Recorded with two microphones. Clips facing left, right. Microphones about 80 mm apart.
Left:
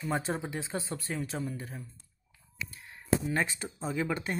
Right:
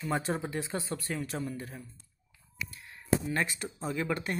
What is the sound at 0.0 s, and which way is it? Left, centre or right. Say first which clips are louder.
Speech: right 1 dB; left.